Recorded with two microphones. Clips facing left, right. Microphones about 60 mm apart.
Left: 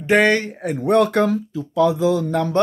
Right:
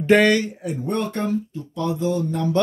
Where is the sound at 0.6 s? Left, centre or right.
Left.